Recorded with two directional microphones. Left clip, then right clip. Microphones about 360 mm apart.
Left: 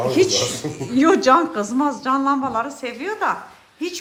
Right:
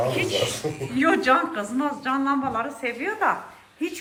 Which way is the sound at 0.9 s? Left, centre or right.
Centre.